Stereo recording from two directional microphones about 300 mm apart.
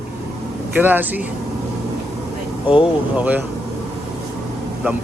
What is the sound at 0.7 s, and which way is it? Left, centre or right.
Speech, centre.